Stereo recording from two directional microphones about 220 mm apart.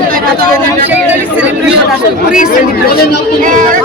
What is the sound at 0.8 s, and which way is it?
Speech, 10° right (ahead or behind).